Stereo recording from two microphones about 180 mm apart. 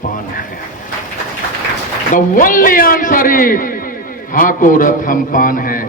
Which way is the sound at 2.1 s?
50° left (ahead or behind).